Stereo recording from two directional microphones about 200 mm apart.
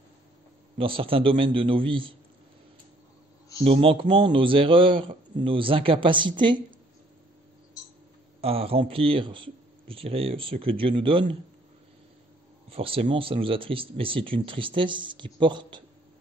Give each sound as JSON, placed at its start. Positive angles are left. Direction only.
{"t": 0.7, "sound": "speech", "side_deg": -25}
{"t": 3.6, "sound": "speech", "side_deg": -30}
{"t": 8.4, "sound": "speech", "side_deg": -30}
{"t": 12.6, "sound": "speech", "side_deg": -30}